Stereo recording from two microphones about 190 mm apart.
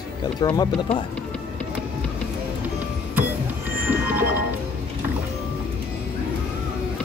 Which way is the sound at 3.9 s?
10° right (ahead or behind).